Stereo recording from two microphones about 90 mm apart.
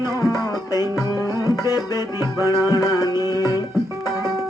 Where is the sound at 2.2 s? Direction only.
30° right (ahead or behind).